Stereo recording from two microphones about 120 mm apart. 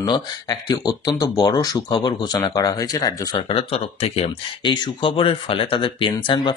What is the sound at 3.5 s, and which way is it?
Speech, 55° left (ahead or behind).